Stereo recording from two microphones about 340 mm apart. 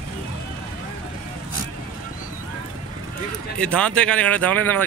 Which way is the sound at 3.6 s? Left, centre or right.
Centre.